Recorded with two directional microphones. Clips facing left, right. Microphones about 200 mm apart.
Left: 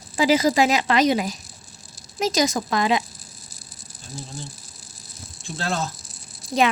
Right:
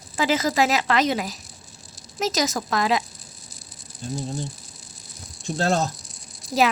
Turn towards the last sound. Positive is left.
turn(degrees=0)  # may be behind; listen again after turning